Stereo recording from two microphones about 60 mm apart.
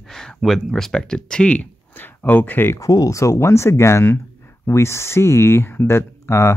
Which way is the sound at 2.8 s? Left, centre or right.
Left.